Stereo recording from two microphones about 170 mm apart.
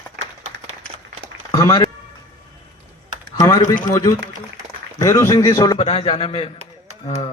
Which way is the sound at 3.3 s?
20° left (ahead or behind).